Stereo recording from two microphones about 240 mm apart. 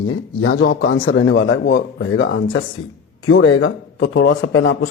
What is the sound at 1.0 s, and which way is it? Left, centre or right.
A man's voice, left.